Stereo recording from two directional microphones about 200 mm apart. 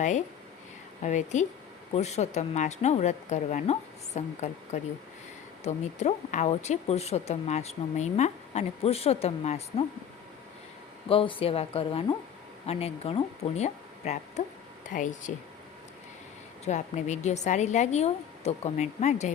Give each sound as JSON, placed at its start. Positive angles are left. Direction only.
{"t": 1.0, "sound": "speech", "side_deg": 35}
{"t": 11.1, "sound": "speech", "side_deg": 25}
{"t": 16.6, "sound": "speech", "side_deg": 35}